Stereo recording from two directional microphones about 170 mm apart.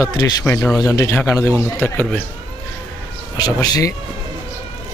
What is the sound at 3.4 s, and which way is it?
Speech, 25° left (ahead or behind).